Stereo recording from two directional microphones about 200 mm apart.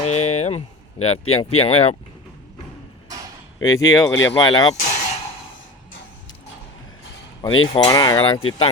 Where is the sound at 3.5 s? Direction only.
20° left (ahead or behind).